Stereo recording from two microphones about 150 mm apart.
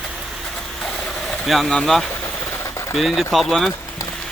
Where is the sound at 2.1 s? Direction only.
20° left (ahead or behind).